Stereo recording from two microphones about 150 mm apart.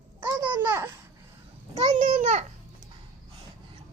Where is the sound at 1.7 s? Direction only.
50° right (ahead or behind).